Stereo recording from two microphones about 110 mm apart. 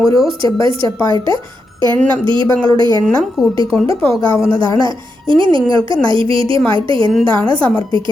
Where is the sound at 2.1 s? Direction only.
50° right (ahead or behind).